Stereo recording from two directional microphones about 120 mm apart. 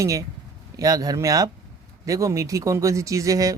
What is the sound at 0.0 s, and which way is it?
A man's voice, 25° right (ahead or behind).